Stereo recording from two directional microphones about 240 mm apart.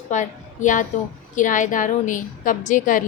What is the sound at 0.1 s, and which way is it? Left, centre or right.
A woman's voice, left.